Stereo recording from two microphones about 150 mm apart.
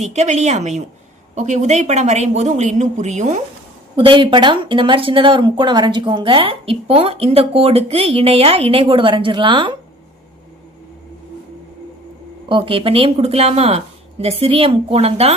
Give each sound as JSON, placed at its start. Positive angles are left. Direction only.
{"t": 0.0, "sound": "speech", "side_deg": -50}
{"t": 3.9, "sound": "speech", "side_deg": -35}
{"t": 12.5, "sound": "speech", "side_deg": -35}